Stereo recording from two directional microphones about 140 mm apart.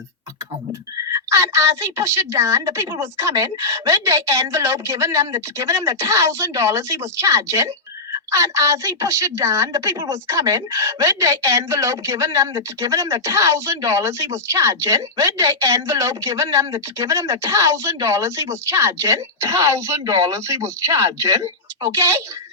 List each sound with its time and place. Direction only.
0.7 s a woman's voice: 20° right (ahead or behind)